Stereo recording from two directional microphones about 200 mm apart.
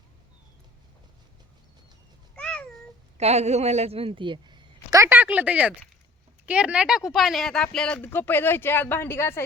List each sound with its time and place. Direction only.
2.3 s meow: 5° left (ahead or behind)
3.2 s a woman's voice: 30° right (ahead or behind); by 9.4 s 10° left (ahead or behind)